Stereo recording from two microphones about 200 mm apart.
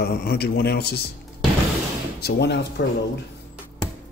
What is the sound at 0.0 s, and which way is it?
A man's voice, 50° left (ahead or behind).